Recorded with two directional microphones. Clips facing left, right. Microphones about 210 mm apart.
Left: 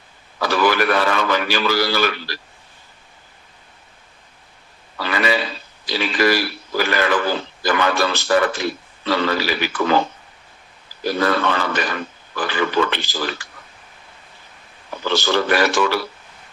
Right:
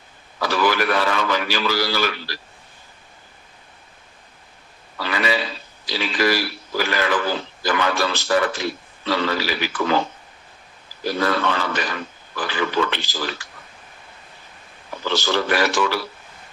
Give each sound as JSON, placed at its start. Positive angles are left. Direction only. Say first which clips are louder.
{"t": 0.4, "sound": "speech", "louder": "left 2 dB", "side_deg": 55}
{"t": 5.0, "sound": "speech", "louder": "left 2 dB", "side_deg": 55}
{"t": 11.2, "sound": "speech", "louder": "left 2 dB", "side_deg": 55}
{"t": 15.1, "sound": "speech", "louder": "left 3 dB", "side_deg": 55}